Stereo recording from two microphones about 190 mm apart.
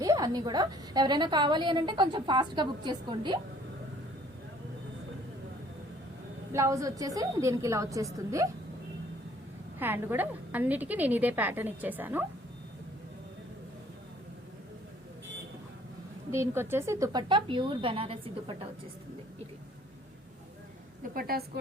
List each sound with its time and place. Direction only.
0.0 s a woman's voice: 20° right (ahead or behind)
6.5 s a woman's voice: 15° right (ahead or behind)
9.7 s a woman's voice: 10° right (ahead or behind)
16.3 s a woman's voice: 15° right (ahead or behind); by 18.5 s 30° right (ahead or behind)
21.2 s a woman's voice: 55° right (ahead or behind)